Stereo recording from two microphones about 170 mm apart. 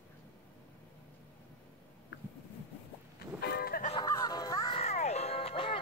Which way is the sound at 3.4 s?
65° left (ahead or behind).